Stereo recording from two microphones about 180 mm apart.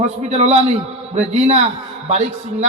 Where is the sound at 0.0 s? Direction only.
40° right (ahead or behind).